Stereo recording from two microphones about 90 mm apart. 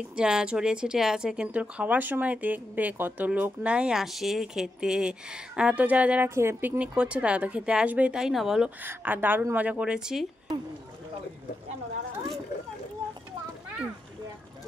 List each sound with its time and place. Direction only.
0.0 s speech: 10° right (ahead or behind)
6.2 s a woman's voice: 25° right (ahead or behind)
6.8 s speech: 10° right (ahead or behind)
8.6 s speech: 20° right (ahead or behind)